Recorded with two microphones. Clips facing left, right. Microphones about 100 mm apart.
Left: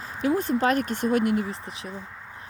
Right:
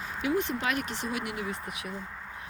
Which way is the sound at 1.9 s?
Centre (ahead or behind).